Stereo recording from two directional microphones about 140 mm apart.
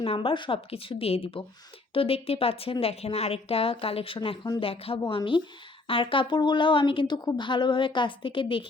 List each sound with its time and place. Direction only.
0.0 s a woman's voice: 40° left (ahead or behind)